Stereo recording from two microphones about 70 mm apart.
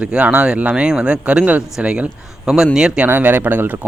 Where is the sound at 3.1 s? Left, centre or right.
Right.